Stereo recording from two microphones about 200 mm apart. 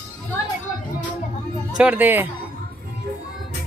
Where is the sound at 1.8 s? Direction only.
10° right (ahead or behind).